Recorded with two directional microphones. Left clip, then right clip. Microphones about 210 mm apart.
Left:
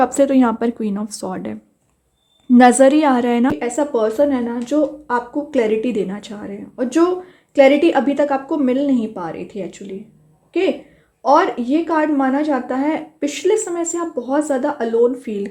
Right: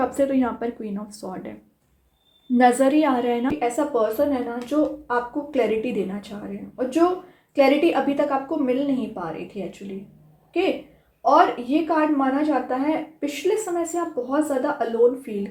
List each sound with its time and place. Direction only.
0.0 s speech: 45° left (ahead or behind)
2.6 s speech: 45° left (ahead or behind)
11.2 s speech: 45° left (ahead or behind)